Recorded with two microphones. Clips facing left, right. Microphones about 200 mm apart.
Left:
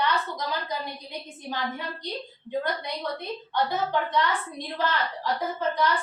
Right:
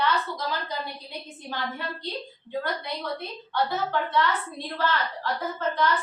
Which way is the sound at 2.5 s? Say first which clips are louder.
Left 1 dB; 20° left (ahead or behind).